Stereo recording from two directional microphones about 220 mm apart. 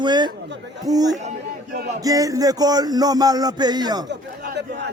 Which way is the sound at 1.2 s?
30° right (ahead or behind).